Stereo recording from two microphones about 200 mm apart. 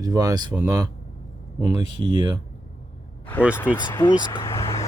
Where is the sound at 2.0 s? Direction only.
25° right (ahead or behind).